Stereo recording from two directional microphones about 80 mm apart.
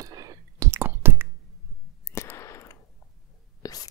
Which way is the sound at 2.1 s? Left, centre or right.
Left.